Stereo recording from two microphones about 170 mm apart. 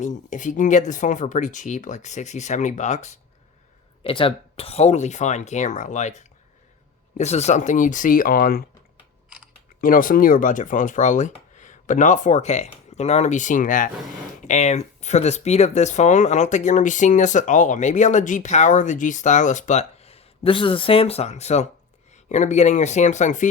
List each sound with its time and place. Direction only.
0.0 s speech: 45° left (ahead or behind)
4.0 s speech: 30° left (ahead or behind); by 8.6 s 60° left (ahead or behind)
9.8 s speech: 55° left (ahead or behind)